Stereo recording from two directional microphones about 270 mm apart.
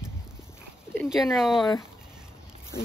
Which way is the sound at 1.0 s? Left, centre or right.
Centre.